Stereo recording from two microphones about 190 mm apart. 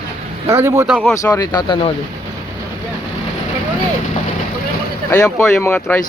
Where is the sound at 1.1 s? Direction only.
20° left (ahead or behind).